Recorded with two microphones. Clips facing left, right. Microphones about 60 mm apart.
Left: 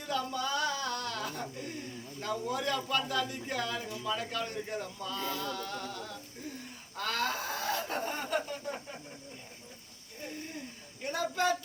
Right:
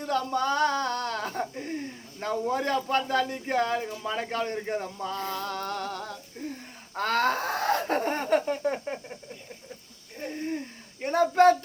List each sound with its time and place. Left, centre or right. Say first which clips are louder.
0.0 s a sound: right 7 dB; right
2.2 s a man's voice: right 6 dB; right
11.0 s speech: right 11 dB; right